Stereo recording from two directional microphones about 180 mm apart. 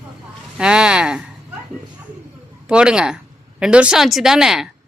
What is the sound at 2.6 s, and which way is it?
Speech, 5° right (ahead or behind).